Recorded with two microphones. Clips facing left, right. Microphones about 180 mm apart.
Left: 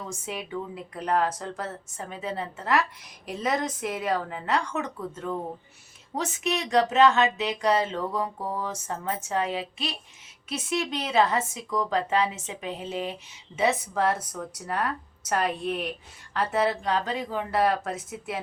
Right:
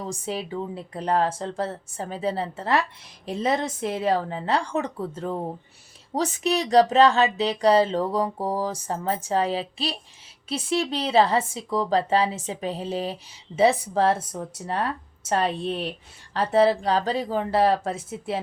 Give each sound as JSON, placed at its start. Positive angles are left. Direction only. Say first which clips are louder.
{"t": 0.0, "sound": "a woman's voice", "louder": "right 5 dB", "side_deg": -35}